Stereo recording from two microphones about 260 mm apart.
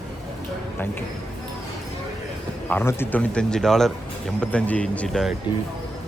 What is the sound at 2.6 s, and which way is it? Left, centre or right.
Speech, centre.